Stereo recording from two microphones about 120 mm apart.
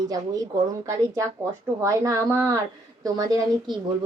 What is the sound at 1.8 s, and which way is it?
Speech, 25° right (ahead or behind).